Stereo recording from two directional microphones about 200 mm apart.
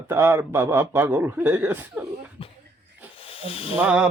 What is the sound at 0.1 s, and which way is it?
Speech, 10° right (ahead or behind).